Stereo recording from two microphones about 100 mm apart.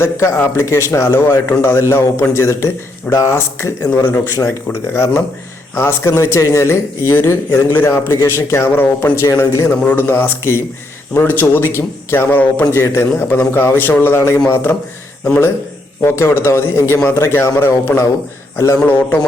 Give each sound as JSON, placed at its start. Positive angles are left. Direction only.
{"t": 0.0, "sound": "speech", "side_deg": 25}
{"t": 5.7, "sound": "a man's voice", "side_deg": 25}